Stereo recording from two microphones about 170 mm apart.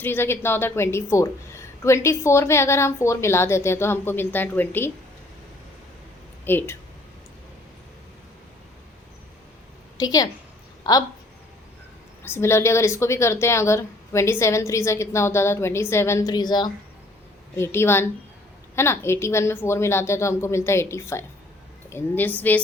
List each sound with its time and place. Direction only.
0.0 s speech: 10° left (ahead or behind)
6.4 s speech: 10° left (ahead or behind)
10.0 s a woman's voice: 20° left (ahead or behind)
12.2 s speech: 15° left (ahead or behind)
17.6 s speech: 15° left (ahead or behind)